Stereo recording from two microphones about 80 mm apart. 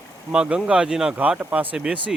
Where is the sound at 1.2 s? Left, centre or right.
Centre.